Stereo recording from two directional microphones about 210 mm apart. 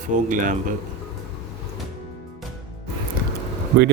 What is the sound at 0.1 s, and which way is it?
Speech, 40° right (ahead or behind).